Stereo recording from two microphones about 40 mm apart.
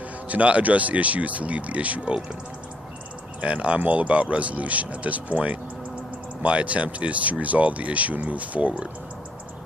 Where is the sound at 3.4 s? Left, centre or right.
Right.